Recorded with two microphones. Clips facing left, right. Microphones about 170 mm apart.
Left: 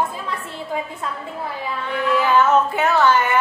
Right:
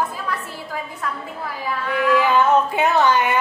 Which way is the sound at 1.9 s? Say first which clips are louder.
Right 3 dB; 25° left (ahead or behind).